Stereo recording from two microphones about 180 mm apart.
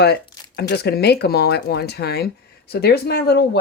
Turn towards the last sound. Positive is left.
turn(degrees=65)  # may be behind; listen again after turning